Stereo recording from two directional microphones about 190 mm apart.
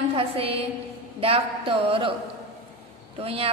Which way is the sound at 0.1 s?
30° right (ahead or behind).